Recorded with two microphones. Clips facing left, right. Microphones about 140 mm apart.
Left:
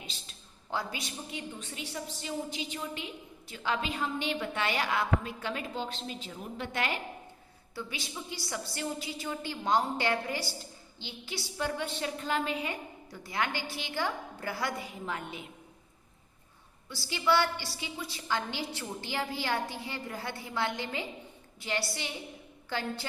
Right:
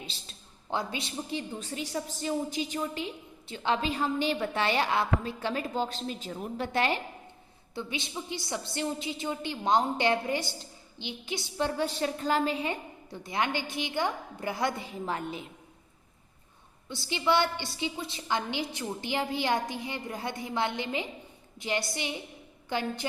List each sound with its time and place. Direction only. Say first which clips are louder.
0.0 s a woman's voice: right 3 dB; 30° right (ahead or behind)
7.8 s a woman's voice: right 4 dB; 20° right (ahead or behind)
15.0 s a woman's voice: right 6 dB; 35° right (ahead or behind)
16.9 s a woman's voice: right 1 dB; 20° right (ahead or behind)